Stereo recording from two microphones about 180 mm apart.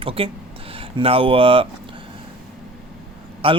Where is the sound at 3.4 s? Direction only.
30° right (ahead or behind).